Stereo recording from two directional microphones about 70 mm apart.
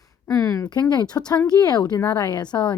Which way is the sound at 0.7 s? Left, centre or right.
Left.